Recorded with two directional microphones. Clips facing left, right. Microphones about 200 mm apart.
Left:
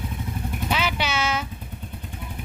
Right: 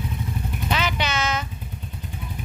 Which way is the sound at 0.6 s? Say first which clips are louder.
Even; 10° left (ahead or behind).